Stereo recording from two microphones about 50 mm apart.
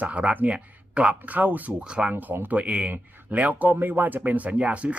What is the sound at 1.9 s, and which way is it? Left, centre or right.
Speech, right.